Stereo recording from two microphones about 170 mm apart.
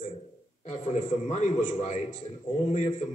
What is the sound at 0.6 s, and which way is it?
A man's voice, 45° left (ahead or behind).